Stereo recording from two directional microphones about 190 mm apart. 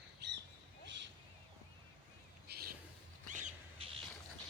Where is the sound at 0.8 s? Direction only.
70° right (ahead or behind).